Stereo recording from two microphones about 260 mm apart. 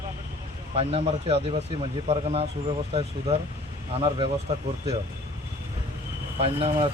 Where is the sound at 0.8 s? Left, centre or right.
Right.